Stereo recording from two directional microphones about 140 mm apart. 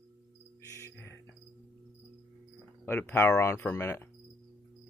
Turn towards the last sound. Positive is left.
turn(degrees=20)  # may be behind; listen again after turning